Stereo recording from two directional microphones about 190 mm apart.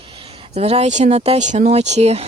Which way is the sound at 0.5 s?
35° right (ahead or behind).